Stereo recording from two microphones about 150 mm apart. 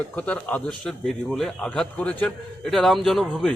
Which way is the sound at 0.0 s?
10° left (ahead or behind).